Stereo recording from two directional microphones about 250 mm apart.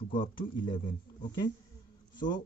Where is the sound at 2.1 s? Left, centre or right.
Centre.